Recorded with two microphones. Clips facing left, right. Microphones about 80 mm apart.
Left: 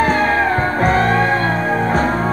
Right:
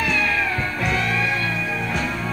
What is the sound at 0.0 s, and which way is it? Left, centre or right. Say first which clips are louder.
Music: left 8 dB; left.